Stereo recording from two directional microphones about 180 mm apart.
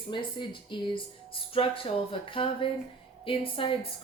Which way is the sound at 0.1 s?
25° left (ahead or behind).